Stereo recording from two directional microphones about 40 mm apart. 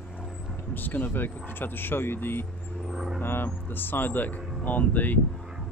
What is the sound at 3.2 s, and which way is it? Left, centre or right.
Speech, left.